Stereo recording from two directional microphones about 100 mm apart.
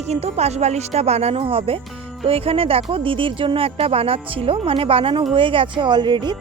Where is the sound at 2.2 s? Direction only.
75° right (ahead or behind).